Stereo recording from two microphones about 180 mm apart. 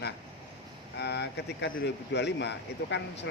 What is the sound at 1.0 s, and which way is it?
Speech, 70° left (ahead or behind).